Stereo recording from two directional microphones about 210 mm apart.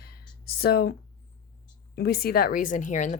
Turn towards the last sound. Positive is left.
turn(degrees=35)  # may be behind; listen again after turning